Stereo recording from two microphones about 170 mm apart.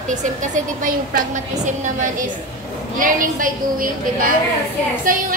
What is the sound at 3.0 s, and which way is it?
A woman's voice, 55° right (ahead or behind).